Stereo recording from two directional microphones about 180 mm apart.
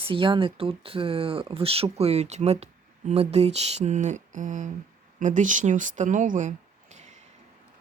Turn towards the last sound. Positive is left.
turn(degrees=-40)  # may be behind; listen again after turning